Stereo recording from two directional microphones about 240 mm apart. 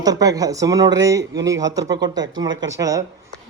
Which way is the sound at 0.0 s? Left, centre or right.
Centre.